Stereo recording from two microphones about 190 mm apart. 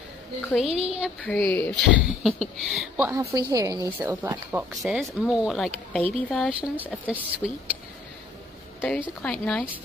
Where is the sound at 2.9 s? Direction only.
10° right (ahead or behind).